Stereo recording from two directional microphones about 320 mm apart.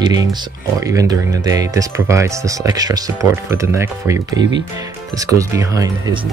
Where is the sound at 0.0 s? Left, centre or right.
Centre.